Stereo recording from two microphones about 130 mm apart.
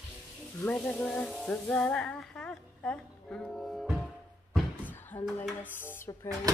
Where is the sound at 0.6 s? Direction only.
10° left (ahead or behind).